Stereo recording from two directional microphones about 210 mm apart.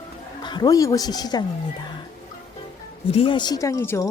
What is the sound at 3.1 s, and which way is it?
Speech, 25° left (ahead or behind).